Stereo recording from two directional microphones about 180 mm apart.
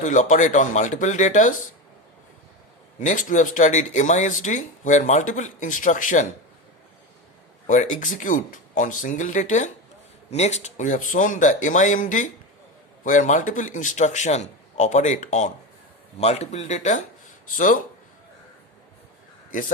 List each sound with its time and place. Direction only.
0.0 s speech: 45° left (ahead or behind)
3.1 s speech: 45° left (ahead or behind)
7.7 s speech: 45° left (ahead or behind)
19.5 s a man's voice: 50° left (ahead or behind)